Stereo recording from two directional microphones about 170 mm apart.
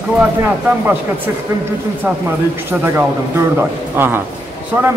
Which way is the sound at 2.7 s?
15° right (ahead or behind).